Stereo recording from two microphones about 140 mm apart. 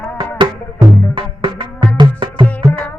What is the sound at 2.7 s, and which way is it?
Music, 10° left (ahead or behind).